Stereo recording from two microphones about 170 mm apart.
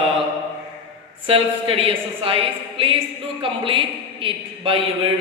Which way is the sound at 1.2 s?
35° right (ahead or behind).